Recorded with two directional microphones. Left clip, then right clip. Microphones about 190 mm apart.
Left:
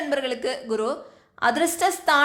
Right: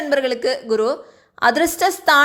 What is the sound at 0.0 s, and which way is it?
A woman's voice, 30° right (ahead or behind).